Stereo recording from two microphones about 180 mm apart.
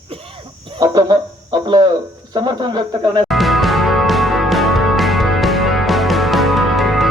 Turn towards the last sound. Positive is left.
turn(degrees=0)  # may be behind; listen again after turning